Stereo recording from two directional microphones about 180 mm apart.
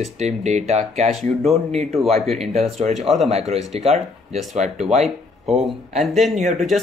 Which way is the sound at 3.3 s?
35° right (ahead or behind).